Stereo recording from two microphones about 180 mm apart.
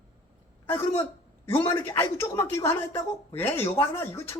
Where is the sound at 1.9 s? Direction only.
15° left (ahead or behind).